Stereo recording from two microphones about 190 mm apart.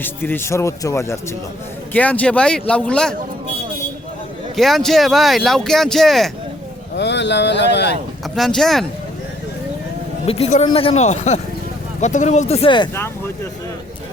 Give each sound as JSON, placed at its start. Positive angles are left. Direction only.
{"t": 0.0, "sound": "speech", "side_deg": 10}
{"t": 4.5, "sound": "speech", "side_deg": 0}
{"t": 6.9, "sound": "speech", "side_deg": 65}
{"t": 8.4, "sound": "speech", "side_deg": 0}
{"t": 10.2, "sound": "speech", "side_deg": 30}
{"t": 12.9, "sound": "speech", "side_deg": 10}